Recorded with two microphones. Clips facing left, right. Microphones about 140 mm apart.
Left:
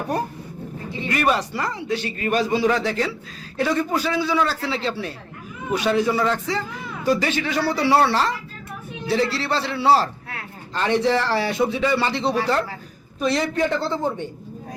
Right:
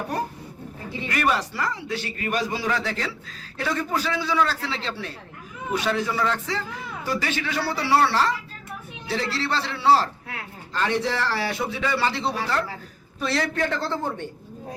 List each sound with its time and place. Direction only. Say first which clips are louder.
1.0 s a man's voice: left 3 dB; 20° left (ahead or behind)